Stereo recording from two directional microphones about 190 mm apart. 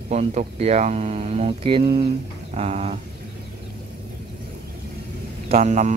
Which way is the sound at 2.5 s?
35° right (ahead or behind).